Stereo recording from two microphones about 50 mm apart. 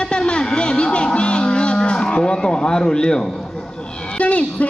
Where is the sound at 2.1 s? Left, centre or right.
Centre.